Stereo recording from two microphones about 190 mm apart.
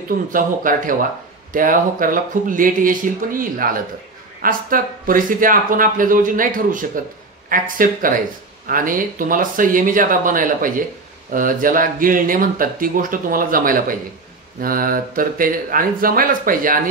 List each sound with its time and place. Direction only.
0.3 s speech: 45° right (ahead or behind)